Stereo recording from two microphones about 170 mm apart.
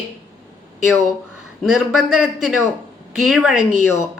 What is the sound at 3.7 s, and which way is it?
Speech, 50° right (ahead or behind).